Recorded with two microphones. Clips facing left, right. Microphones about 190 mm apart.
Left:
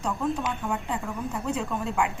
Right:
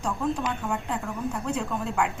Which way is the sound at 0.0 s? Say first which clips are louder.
Even; centre (ahead or behind).